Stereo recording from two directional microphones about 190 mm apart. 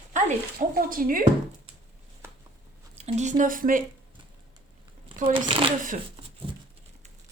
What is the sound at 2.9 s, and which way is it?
Speech, 35° right (ahead or behind).